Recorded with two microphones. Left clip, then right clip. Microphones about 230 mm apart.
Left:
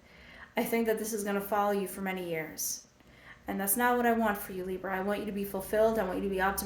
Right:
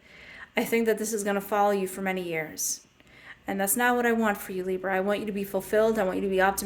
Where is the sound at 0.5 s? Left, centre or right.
Right.